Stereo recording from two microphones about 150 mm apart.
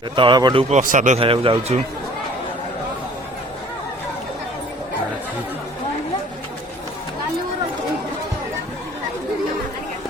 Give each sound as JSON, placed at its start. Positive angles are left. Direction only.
{"t": 0.2, "sound": "a man's voice", "side_deg": -30}
{"t": 0.7, "sound": "a man's voice", "side_deg": -55}
{"t": 1.2, "sound": "a man's voice", "side_deg": -35}